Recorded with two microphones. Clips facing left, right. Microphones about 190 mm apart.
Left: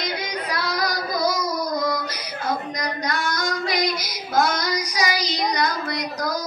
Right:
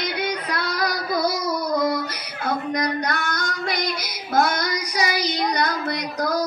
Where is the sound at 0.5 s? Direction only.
60° right (ahead or behind).